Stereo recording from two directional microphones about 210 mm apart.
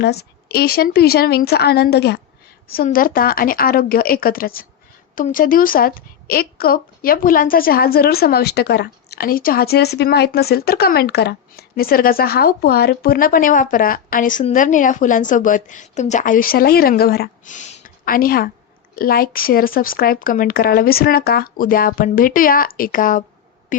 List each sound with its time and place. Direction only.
0.0 s a woman's voice: 50° left (ahead or behind)